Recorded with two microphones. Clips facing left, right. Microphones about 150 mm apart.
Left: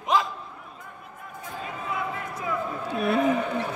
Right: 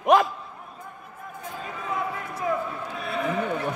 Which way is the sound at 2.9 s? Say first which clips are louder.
Left 8 dB; 65° left (ahead or behind).